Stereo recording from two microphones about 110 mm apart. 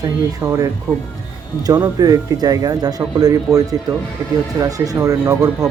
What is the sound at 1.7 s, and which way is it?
A man's voice, 30° right (ahead or behind).